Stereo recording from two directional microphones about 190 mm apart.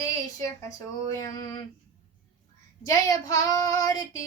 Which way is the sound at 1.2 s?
20° left (ahead or behind).